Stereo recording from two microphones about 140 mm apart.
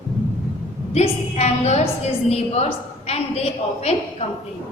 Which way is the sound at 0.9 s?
50° left (ahead or behind).